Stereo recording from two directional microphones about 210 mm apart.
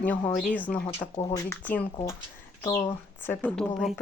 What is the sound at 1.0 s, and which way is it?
A woman's voice, 15° left (ahead or behind).